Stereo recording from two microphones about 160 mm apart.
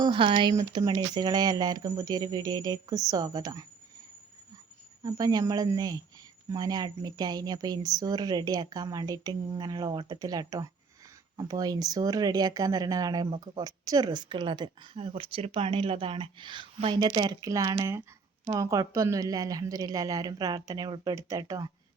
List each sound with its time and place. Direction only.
0.0 s speech: 30° right (ahead or behind)
5.0 s speech: 25° right (ahead or behind)